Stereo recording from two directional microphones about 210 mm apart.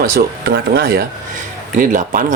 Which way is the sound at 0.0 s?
45° right (ahead or behind).